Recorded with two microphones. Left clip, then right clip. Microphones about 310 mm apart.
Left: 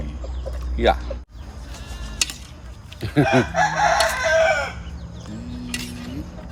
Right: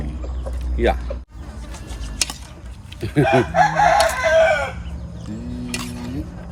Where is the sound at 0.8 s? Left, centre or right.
Centre.